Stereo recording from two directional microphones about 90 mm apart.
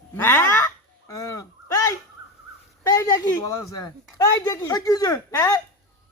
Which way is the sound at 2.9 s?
35° left (ahead or behind).